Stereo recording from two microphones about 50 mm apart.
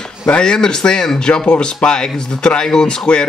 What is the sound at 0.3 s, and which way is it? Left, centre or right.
Speech, centre.